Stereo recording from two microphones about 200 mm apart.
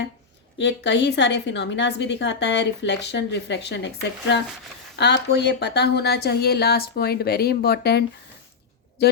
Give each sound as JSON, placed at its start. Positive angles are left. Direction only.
{"t": 0.6, "sound": "a woman's voice", "side_deg": 60}
{"t": 4.9, "sound": "a woman's voice", "side_deg": 60}